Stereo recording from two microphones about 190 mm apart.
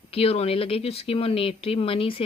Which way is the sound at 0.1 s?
30° left (ahead or behind).